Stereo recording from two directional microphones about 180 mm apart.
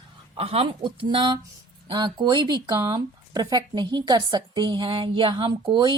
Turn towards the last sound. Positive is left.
turn(degrees=-25)  # may be behind; listen again after turning